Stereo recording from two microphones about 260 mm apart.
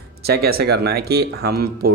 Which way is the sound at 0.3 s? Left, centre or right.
Right.